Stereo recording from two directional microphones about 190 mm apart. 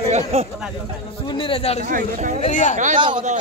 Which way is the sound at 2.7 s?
40° right (ahead or behind).